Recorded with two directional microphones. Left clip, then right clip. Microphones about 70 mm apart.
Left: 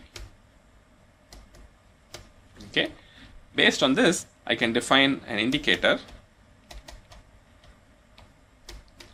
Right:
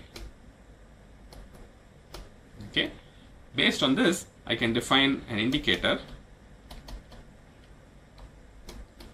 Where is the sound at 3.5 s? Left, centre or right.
Left.